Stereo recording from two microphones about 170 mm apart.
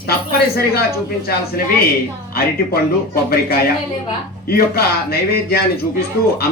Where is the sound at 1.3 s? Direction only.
65° left (ahead or behind).